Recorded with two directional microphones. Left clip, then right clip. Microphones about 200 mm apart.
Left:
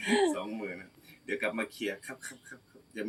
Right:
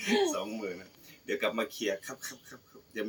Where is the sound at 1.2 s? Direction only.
5° right (ahead or behind).